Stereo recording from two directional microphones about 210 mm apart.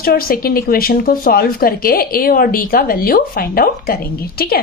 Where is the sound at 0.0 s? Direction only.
45° left (ahead or behind).